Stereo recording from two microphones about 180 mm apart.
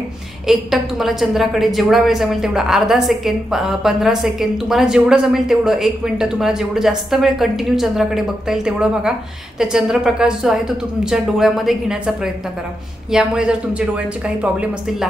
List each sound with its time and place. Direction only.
0.5 s a woman's voice: centre (ahead or behind)